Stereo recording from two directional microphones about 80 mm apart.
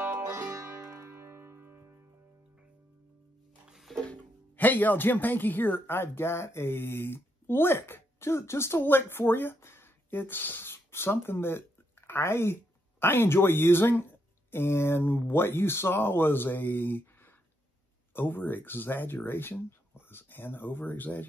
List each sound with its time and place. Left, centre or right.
0.1 s music: right
3.6 s music: centre
4.0 s speech: centre
18.1 s speech: left